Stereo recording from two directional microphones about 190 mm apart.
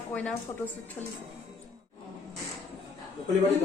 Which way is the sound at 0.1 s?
5° left (ahead or behind).